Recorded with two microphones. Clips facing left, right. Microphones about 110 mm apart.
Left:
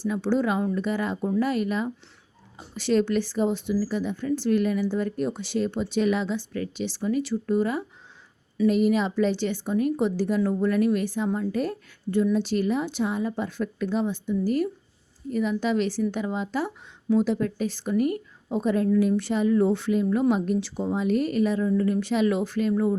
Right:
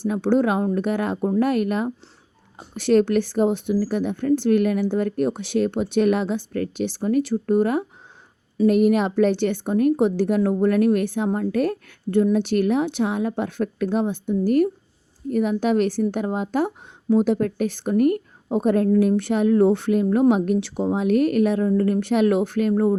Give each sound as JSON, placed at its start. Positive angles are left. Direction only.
{"t": 0.0, "sound": "a woman's voice", "side_deg": -55}